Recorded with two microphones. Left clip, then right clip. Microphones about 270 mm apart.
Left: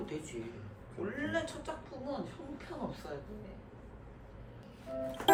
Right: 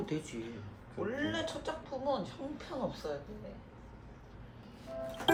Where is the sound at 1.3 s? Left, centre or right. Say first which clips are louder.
Even; centre.